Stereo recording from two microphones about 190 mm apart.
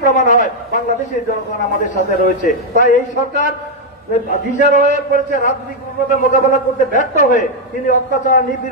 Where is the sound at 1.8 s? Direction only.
45° left (ahead or behind).